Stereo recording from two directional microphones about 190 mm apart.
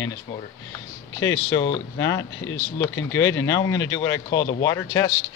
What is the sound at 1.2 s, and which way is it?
Speech, 15° left (ahead or behind).